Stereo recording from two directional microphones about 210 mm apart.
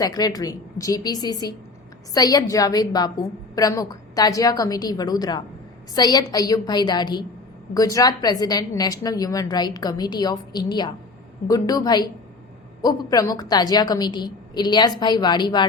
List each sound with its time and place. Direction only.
0.0 s a woman's voice: 20° left (ahead or behind)